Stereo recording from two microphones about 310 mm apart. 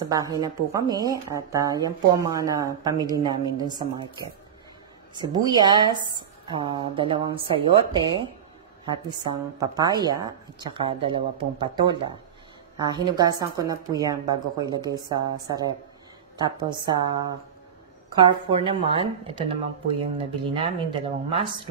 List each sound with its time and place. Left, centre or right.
0.0 s a woman's voice: centre